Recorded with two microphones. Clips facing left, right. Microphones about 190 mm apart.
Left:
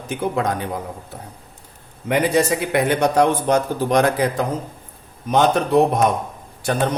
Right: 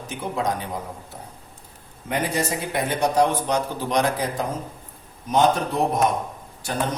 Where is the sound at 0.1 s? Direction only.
60° left (ahead or behind).